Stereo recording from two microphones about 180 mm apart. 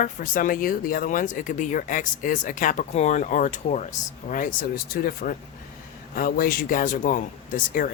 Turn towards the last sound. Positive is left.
turn(degrees=50)  # may be behind; listen again after turning